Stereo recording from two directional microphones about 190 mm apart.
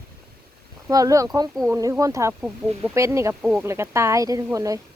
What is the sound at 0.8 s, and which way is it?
Speech, 15° right (ahead or behind).